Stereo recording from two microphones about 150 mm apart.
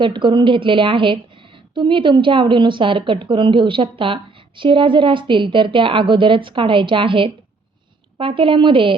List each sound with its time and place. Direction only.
0.0 s a woman's voice: 30° right (ahead or behind)